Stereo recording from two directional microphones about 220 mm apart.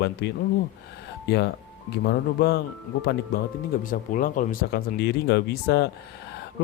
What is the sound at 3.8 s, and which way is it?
Speech, 35° left (ahead or behind).